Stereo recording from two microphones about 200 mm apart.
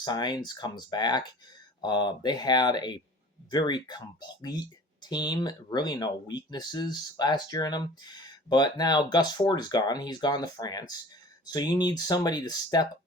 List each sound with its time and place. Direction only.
0.0 s speech: 20° left (ahead or behind)